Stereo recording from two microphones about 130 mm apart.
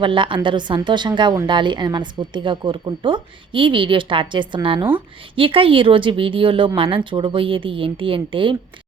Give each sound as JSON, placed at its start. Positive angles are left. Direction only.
{"t": 0.0, "sound": "a woman's voice", "side_deg": -40}